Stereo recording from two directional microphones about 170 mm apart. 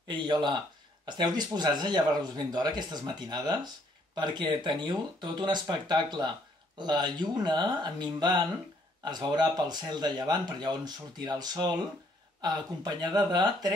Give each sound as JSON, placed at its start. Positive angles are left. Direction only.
{"t": 0.1, "sound": "speech", "side_deg": -25}